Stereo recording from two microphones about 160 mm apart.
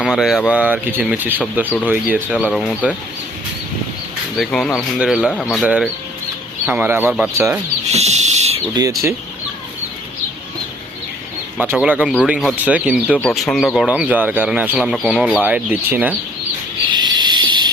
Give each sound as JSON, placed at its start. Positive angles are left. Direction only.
{"t": 0.0, "sound": "speech", "side_deg": 0}
{"t": 4.4, "sound": "speech", "side_deg": 5}
{"t": 7.9, "sound": "owl", "side_deg": -45}
{"t": 11.6, "sound": "speech", "side_deg": -10}
{"t": 16.9, "sound": "a sound", "side_deg": -25}